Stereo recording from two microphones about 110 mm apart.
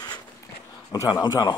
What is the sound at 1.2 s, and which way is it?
Speech, 40° left (ahead or behind).